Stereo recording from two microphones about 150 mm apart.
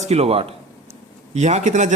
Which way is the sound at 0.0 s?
45° right (ahead or behind).